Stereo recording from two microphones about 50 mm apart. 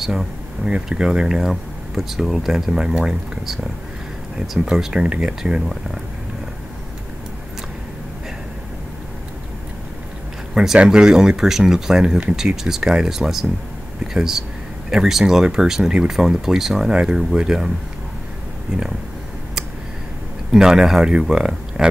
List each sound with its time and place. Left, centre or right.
0.0 s speech: centre
0.6 s speech: right
0.9 s speech: centre
1.5 s speech: centre
4.6 s speech: centre
10.5 s speech: centre
20.5 s speech: centre